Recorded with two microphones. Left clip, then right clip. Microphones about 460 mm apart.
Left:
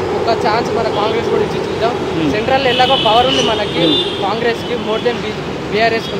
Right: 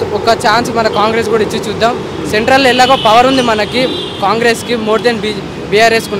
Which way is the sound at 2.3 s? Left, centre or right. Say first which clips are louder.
Right 6 dB; right.